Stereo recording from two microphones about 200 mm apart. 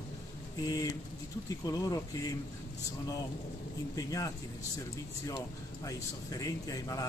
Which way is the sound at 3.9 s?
15° left (ahead or behind).